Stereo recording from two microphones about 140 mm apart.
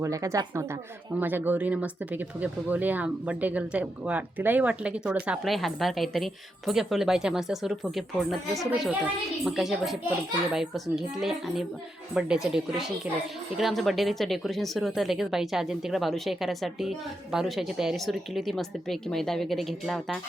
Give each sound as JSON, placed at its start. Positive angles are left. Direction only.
{"t": 0.0, "sound": "a woman's voice", "side_deg": -20}